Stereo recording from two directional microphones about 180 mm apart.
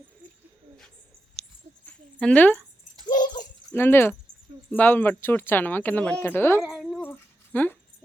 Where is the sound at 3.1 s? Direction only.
45° left (ahead or behind).